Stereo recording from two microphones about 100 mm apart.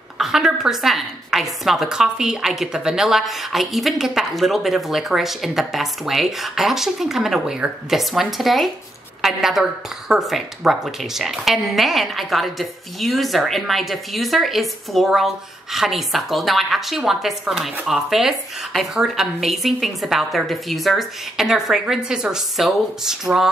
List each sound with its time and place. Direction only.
0.2 s a woman's voice: 5° right (ahead or behind)